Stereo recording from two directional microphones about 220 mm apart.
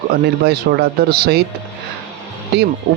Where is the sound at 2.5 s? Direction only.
45° right (ahead or behind).